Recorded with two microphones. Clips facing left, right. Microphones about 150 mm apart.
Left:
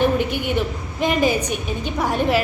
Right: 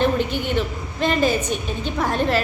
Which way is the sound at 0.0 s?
10° left (ahead or behind).